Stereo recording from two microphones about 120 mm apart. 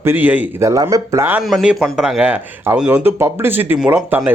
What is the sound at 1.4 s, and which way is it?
Speech, centre (ahead or behind).